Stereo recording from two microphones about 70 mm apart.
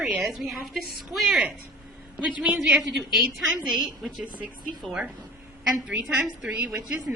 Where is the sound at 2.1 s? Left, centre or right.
Centre.